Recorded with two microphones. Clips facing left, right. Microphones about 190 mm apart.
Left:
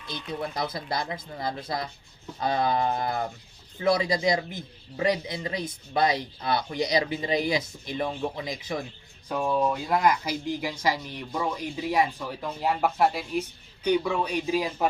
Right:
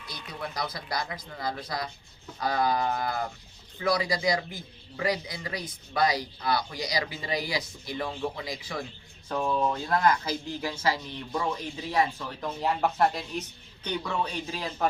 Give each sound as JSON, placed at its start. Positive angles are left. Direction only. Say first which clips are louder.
{"t": 0.1, "sound": "speech", "louder": "left 5 dB", "side_deg": 25}